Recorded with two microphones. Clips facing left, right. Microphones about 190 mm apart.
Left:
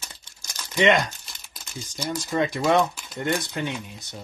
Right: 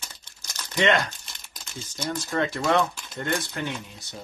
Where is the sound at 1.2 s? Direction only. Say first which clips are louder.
Even; centre (ahead or behind).